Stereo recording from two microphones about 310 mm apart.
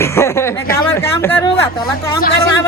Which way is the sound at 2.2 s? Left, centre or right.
Left.